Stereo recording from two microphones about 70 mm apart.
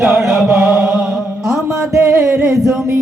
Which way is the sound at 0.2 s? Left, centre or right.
Centre.